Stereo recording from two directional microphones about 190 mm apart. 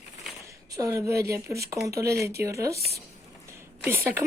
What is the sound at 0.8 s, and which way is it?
Speech, 15° right (ahead or behind).